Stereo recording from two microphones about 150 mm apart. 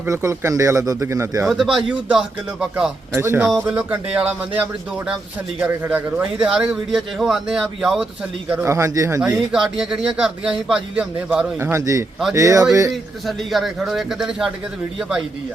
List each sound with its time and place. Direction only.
0.0 s speech: 20° right (ahead or behind)
1.4 s speech: 5° right (ahead or behind)
3.1 s a man's voice: 15° right (ahead or behind)
8.4 s speech: 15° right (ahead or behind)
9.2 s a man's voice: 5° right (ahead or behind)
11.7 s speech: 20° right (ahead or behind)
12.9 s speech: centre (ahead or behind)